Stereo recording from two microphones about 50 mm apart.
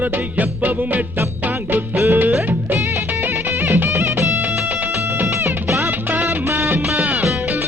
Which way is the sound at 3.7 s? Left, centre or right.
Right.